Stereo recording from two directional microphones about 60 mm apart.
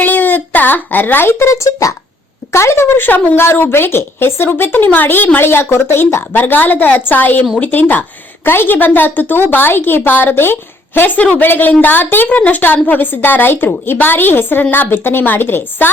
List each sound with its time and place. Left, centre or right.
0.0 s a woman's voice: left
2.5 s a woman's voice: left